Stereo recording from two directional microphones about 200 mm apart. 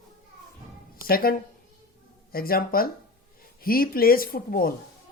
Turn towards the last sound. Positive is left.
turn(degrees=45)  # may be behind; listen again after turning